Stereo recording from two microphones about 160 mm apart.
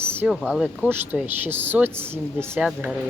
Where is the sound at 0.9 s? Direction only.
10° right (ahead or behind).